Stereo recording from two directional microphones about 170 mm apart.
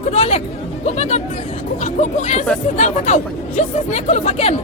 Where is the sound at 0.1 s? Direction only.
35° left (ahead or behind).